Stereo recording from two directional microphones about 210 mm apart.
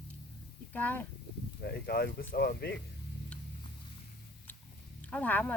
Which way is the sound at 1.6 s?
50° left (ahead or behind).